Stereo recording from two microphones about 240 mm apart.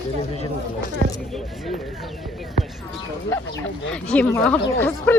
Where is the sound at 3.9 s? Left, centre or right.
Centre.